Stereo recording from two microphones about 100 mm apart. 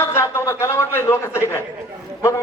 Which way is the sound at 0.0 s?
25° left (ahead or behind).